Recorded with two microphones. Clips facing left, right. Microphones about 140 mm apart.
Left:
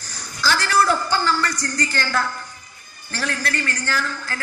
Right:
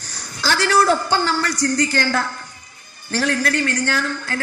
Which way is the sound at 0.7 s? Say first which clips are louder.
Right 3 dB; 45° right (ahead or behind).